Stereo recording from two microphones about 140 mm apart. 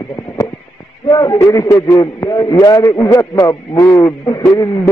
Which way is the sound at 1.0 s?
30° left (ahead or behind).